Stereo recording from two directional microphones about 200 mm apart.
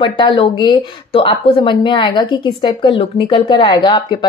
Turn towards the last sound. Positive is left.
turn(degrees=25)  # may be behind; listen again after turning